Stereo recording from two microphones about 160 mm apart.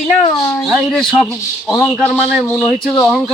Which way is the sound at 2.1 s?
5° right (ahead or behind).